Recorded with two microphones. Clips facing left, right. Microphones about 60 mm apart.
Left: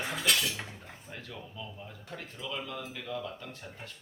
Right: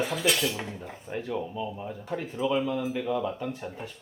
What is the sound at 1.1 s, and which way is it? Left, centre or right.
Speech, right.